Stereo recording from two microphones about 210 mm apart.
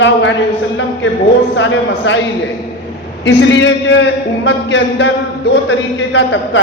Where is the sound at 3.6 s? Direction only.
60° left (ahead or behind).